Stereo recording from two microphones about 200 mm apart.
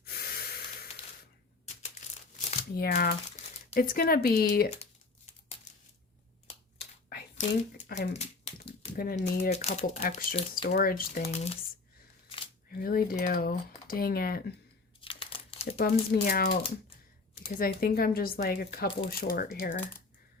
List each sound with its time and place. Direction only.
0.0 s a sound: 50° left (ahead or behind)
2.6 s speech: 50° left (ahead or behind)
3.4 s crumpling: 35° left (ahead or behind)
3.8 s speech: 45° left (ahead or behind)
4.8 s crumpling: 30° left (ahead or behind)
7.1 s a sound: 50° left (ahead or behind); by 8.5 s 35° left (ahead or behind)
9.0 s speech: 45° left (ahead or behind)
10.5 s speech: 50° left (ahead or behind); by 11.5 s 35° left (ahead or behind)
12.7 s speech: 45° left (ahead or behind)
15.0 s crumpling: 25° left (ahead or behind)
16.2 s speech: 45° left (ahead or behind)
17.6 s speech: 45° left (ahead or behind)